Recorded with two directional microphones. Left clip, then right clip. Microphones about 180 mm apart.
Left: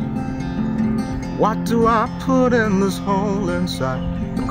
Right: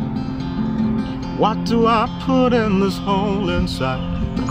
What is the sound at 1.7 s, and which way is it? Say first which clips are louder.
Music: even; centre (ahead or behind).